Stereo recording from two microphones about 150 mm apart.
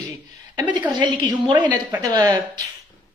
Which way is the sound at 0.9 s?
30° right (ahead or behind).